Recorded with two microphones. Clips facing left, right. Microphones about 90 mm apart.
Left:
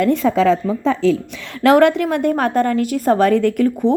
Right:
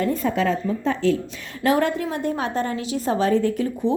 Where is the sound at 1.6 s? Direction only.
75° left (ahead or behind).